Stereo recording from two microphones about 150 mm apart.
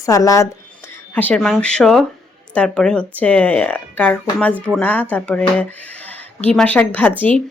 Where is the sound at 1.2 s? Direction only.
10° left (ahead or behind).